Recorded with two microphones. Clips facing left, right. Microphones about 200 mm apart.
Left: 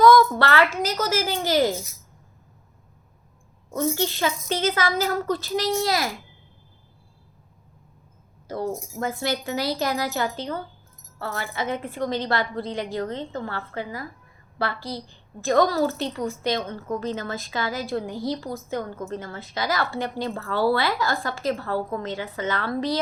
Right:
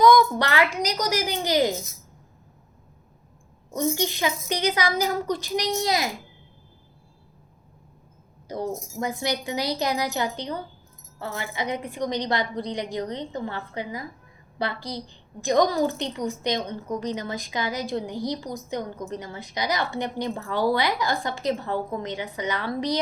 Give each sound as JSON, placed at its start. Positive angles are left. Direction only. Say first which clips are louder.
{"t": 0.0, "sound": "a woman's voice", "louder": "left 2 dB", "side_deg": -20}
{"t": 3.7, "sound": "a woman's voice", "louder": "left 1 dB", "side_deg": -15}
{"t": 8.4, "sound": "a woman's voice", "louder": "left 1 dB", "side_deg": -15}